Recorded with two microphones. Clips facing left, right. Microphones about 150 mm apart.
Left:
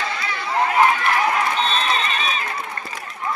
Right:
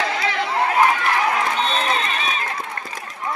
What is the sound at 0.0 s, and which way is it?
Chatter, 90° right.